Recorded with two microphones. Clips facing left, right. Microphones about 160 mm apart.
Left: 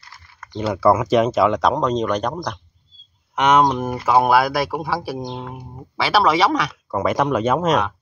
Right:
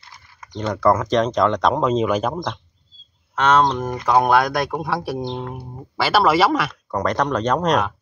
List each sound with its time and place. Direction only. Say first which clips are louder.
0.0 s typing: even; 15° right (ahead or behind)
0.6 s speech: left 1 dB; 5° left (ahead or behind)
3.3 s speech: left 1 dB; 15° left (ahead or behind)